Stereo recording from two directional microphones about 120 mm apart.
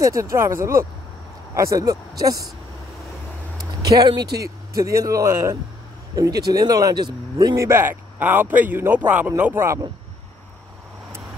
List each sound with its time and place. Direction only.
0.0 s speech: 25° right (ahead or behind)
3.9 s speech: 35° right (ahead or behind)